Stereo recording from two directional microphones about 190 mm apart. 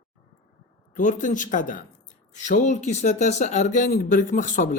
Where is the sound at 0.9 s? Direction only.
40° left (ahead or behind).